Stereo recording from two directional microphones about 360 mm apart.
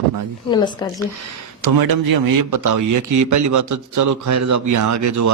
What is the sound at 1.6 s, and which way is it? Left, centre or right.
Speech, right.